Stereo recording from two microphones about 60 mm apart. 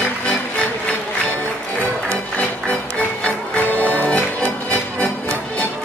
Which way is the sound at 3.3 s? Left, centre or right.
Left.